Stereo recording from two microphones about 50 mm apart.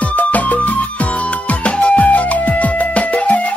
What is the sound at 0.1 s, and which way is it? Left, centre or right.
Music, left.